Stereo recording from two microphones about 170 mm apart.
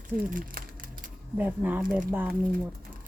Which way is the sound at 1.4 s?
10° right (ahead or behind).